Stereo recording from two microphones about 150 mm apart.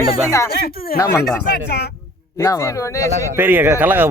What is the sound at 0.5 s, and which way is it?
Speech, 90° left.